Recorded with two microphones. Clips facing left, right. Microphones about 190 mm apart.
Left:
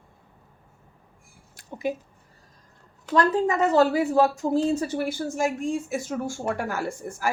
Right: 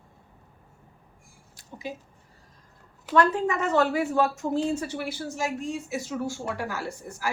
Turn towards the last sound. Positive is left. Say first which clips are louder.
# left 4 dB
turn(degrees=50)  # may be behind; listen again after turning